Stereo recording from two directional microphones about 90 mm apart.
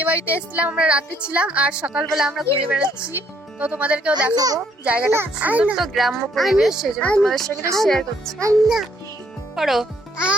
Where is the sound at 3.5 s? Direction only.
15° right (ahead or behind).